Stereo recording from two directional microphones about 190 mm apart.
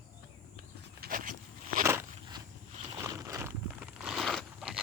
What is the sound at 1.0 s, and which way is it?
Walk, 45° right (ahead or behind).